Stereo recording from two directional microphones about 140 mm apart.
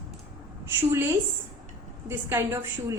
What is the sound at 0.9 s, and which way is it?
A woman's voice, 15° right (ahead or behind).